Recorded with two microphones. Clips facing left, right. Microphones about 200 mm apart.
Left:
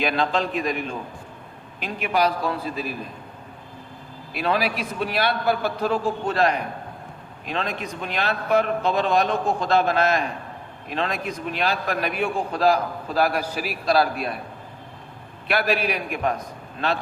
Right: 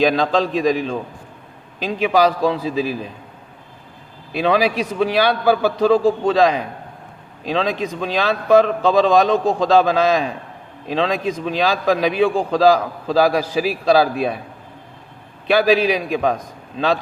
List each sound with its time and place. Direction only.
0.0 s a man's voice: 90° right
4.4 s a man's voice: 90° right
15.4 s a man's voice: 90° right